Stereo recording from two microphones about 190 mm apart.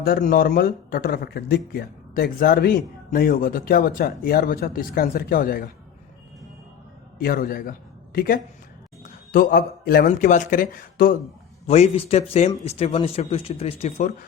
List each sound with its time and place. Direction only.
0.0 s speech: 50° left (ahead or behind)
7.2 s a man's voice: 50° left (ahead or behind)
11.6 s speech: 35° left (ahead or behind)